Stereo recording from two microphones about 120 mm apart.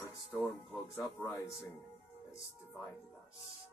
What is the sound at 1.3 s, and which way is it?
Speech, 25° left (ahead or behind).